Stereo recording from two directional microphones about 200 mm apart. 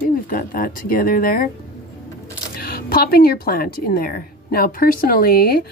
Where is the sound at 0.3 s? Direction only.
45° left (ahead or behind).